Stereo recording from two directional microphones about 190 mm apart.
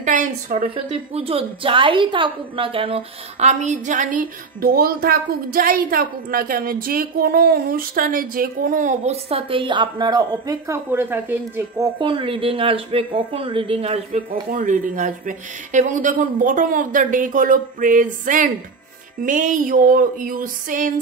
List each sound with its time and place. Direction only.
0.0 s speech: 40° right (ahead or behind)
1.1 s a woman's voice: 30° right (ahead or behind); by 11.9 s 10° right (ahead or behind)
12.0 s speech: 25° right (ahead or behind)
14.6 s a woman's voice: 45° right (ahead or behind)